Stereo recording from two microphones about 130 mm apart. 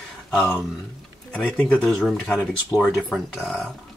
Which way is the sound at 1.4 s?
10° left (ahead or behind).